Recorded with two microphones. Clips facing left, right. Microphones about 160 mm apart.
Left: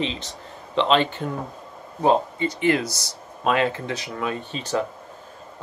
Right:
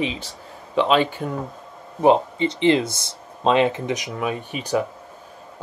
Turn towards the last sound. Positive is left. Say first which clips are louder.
# right 2 dB
turn(degrees=-15)  # may be behind; listen again after turning